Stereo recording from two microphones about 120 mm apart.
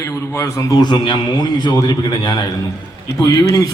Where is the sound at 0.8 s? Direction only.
40° left (ahead or behind).